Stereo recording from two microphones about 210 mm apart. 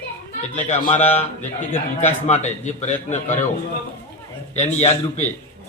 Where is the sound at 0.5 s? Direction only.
35° left (ahead or behind).